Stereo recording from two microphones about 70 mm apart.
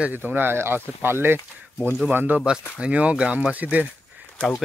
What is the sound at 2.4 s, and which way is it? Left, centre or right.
Speech, centre.